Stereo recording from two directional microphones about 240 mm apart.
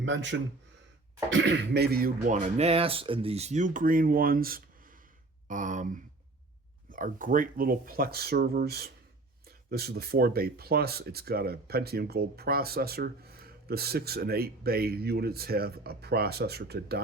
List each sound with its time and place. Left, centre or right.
0.0 s speech: right